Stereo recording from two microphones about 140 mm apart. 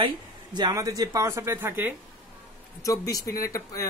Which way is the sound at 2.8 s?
25° left (ahead or behind).